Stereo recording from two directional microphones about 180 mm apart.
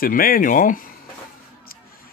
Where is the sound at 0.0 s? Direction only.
50° left (ahead or behind).